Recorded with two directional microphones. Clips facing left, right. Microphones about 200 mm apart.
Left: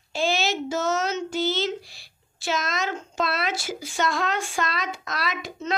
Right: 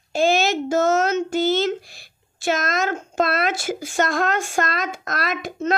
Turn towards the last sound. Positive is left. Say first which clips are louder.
# right 6 dB
turn(degrees=-50)  # may be behind; listen again after turning